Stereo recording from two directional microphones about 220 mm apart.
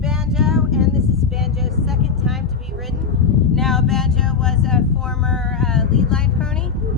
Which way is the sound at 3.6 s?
Centre (ahead or behind).